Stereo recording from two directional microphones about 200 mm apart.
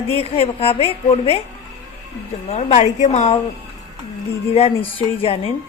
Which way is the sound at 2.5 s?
35° left (ahead or behind).